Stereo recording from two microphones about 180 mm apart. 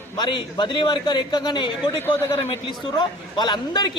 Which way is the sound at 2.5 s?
25° left (ahead or behind).